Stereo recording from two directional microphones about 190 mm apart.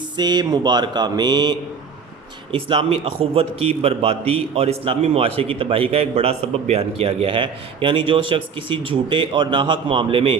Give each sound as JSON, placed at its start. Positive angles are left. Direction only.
{"t": 0.2, "sound": "a man's voice", "side_deg": -20}